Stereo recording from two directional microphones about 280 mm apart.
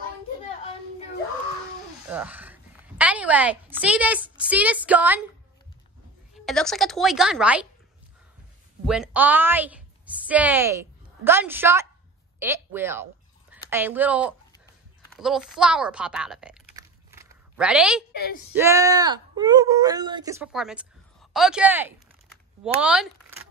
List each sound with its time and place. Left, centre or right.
2.0 s a woman's voice: centre
6.3 s speech: centre
8.8 s a woman's voice: centre
16.7 s a sound: centre
18.1 s a woman's voice: left
18.5 s speech: centre